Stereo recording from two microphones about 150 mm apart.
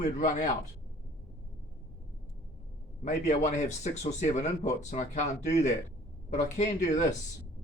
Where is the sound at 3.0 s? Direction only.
55° left (ahead or behind).